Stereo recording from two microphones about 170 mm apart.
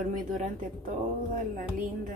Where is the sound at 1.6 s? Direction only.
50° right (ahead or behind).